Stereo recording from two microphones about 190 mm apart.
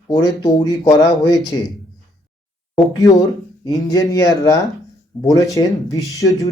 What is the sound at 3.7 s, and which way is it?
Speech, 20° left (ahead or behind).